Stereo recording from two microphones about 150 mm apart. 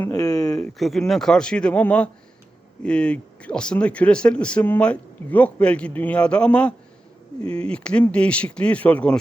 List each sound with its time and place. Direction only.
0.1 s speech: 25° left (ahead or behind)
0.5 s speech: centre (ahead or behind)